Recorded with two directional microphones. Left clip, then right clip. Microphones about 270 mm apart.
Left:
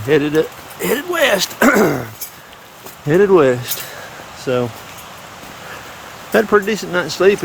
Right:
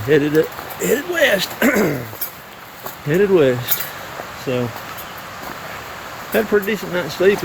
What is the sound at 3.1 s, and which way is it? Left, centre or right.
Speech, centre.